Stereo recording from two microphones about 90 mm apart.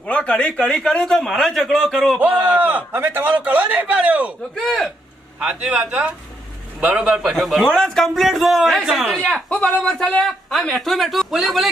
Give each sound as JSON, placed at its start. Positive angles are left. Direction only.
{"t": 0.1, "sound": "a man's voice", "side_deg": 15}
{"t": 2.1, "sound": "a man's voice", "side_deg": -20}
{"t": 4.6, "sound": "a man's voice", "side_deg": 5}
{"t": 5.4, "sound": "a man's voice", "side_deg": -10}
{"t": 9.3, "sound": "a man's voice", "side_deg": 10}